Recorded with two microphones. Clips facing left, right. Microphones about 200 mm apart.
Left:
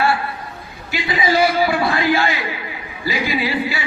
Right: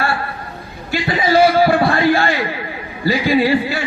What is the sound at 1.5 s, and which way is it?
Music, 50° right (ahead or behind).